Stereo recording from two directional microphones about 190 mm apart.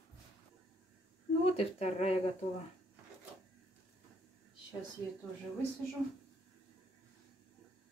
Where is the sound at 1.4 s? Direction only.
30° left (ahead or behind).